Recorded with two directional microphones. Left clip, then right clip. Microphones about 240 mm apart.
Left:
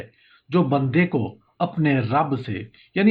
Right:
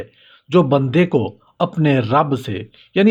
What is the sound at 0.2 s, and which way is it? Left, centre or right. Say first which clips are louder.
Speech: right 7 dB; right.